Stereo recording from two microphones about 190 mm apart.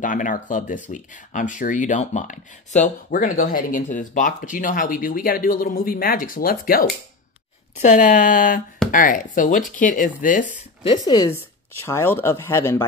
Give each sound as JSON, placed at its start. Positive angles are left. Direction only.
{"t": 0.0, "sound": "speech", "side_deg": 45}
{"t": 7.8, "sound": "speech", "side_deg": 40}
{"t": 10.8, "sound": "speech", "side_deg": 25}